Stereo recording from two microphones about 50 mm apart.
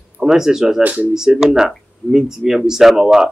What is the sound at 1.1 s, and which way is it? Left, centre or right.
Speech, centre.